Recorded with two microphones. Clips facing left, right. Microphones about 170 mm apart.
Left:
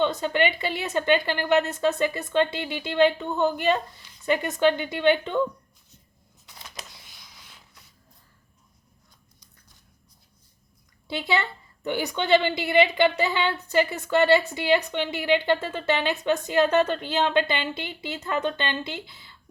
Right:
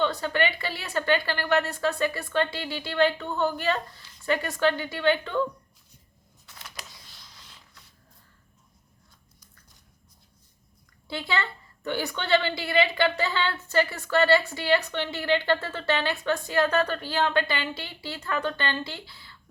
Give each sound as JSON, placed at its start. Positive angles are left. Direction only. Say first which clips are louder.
{"t": 0.0, "sound": "a woman's voice", "louder": "left 3 dB", "side_deg": 20}
{"t": 6.4, "sound": "a sound", "louder": "left 2 dB", "side_deg": 15}
{"t": 11.1, "sound": "a woman's voice", "louder": "left 3 dB", "side_deg": 20}